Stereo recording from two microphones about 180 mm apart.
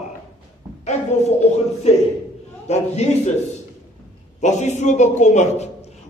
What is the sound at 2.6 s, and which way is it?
Speech, 40° left (ahead or behind).